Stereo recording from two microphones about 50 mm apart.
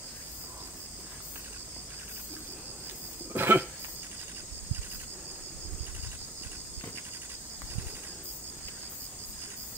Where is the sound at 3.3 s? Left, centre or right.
Right.